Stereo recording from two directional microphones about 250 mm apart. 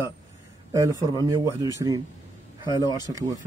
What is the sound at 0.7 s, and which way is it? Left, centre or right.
Speech, centre.